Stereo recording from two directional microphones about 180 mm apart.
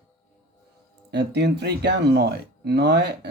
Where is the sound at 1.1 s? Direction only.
70° right (ahead or behind).